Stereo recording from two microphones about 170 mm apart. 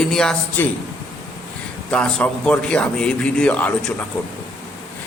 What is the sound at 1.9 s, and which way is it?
A man's voice, 5° left (ahead or behind).